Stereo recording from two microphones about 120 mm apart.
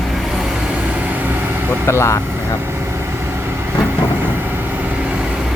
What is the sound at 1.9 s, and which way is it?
Speech, 25° left (ahead or behind).